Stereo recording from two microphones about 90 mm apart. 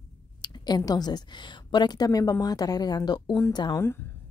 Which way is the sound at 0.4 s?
50° left (ahead or behind).